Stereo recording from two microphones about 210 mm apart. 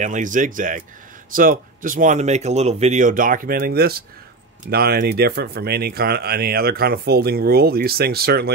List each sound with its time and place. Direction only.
0.0 s speech: 35° right (ahead or behind)